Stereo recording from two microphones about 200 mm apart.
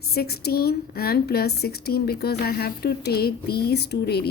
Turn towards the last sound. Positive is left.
turn(degrees=55)  # may be behind; listen again after turning